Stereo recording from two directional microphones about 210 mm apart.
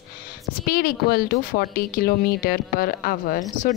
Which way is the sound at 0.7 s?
45° left (ahead or behind).